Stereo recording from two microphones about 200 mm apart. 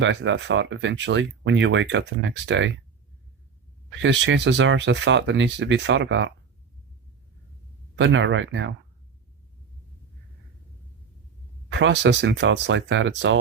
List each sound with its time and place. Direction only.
0.0 s speech: 65° right (ahead or behind)
4.0 s speech: 65° right (ahead or behind)
7.9 s speech: 65° right (ahead or behind)
11.7 s speech: 65° right (ahead or behind)